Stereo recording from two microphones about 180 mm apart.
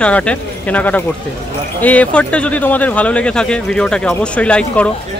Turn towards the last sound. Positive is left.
turn(degrees=5)  # may be behind; listen again after turning